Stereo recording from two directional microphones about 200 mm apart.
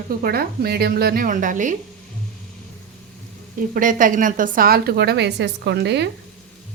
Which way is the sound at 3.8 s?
40° right (ahead or behind).